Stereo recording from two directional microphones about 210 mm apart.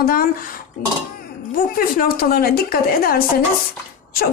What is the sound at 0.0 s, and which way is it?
Speech, 45° left (ahead or behind).